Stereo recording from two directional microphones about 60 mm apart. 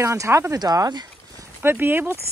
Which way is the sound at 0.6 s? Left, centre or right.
Right.